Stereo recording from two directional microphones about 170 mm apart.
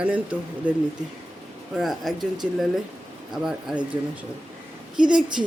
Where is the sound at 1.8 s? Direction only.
Centre (ahead or behind).